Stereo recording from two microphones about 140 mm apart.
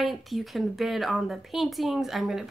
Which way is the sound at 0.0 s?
Centre (ahead or behind).